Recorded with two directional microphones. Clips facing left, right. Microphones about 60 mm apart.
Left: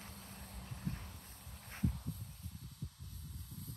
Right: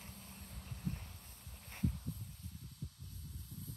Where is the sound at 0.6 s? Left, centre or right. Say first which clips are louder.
Left 1 dB; centre.